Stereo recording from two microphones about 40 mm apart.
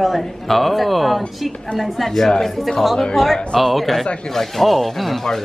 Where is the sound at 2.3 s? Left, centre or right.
Centre.